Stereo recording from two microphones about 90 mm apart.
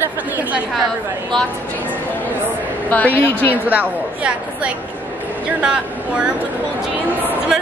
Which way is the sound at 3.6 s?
15° right (ahead or behind).